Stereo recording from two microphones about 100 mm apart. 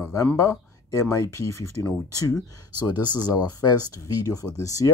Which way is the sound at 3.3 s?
40° left (ahead or behind).